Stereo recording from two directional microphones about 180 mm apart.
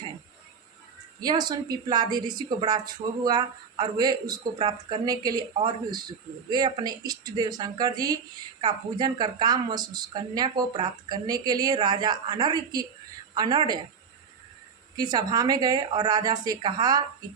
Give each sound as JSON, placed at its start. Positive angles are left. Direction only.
{"t": 1.2, "sound": "a woman's voice", "side_deg": -25}
{"t": 14.9, "sound": "a woman's voice", "side_deg": -20}